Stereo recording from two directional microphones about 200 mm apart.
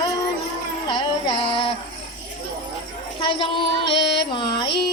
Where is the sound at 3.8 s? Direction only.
60° left (ahead or behind).